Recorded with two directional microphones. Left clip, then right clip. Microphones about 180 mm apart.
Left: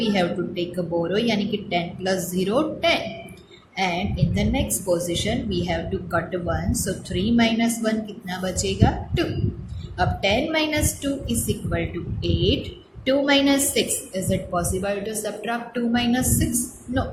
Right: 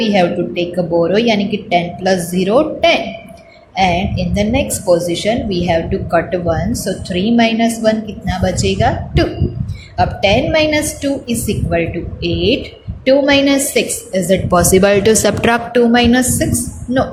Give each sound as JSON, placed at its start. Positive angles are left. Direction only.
{"t": 0.0, "sound": "a woman's voice", "side_deg": -25}
{"t": 14.5, "sound": "a woman's voice", "side_deg": -45}